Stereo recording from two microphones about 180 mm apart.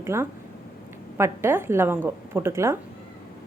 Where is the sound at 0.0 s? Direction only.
15° right (ahead or behind).